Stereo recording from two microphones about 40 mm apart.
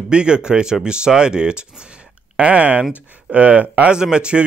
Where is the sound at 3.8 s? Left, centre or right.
Right.